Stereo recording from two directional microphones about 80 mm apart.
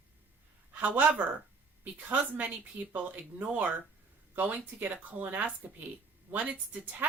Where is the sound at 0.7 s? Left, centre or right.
Right.